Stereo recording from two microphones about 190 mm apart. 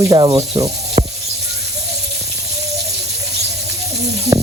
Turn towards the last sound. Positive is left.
turn(degrees=-15)  # may be behind; listen again after turning